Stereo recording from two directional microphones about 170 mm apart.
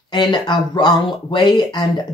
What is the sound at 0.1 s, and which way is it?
Speech, 25° left (ahead or behind).